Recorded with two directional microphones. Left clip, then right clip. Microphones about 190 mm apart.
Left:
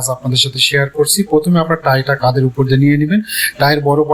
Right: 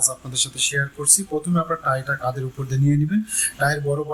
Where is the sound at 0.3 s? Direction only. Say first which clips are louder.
Left 13 dB; 25° left (ahead or behind).